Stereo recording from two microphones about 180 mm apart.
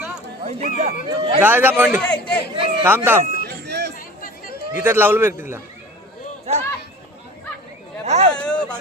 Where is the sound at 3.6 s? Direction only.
65° right (ahead or behind).